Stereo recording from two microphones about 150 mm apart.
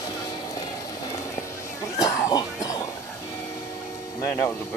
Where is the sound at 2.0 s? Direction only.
25° left (ahead or behind).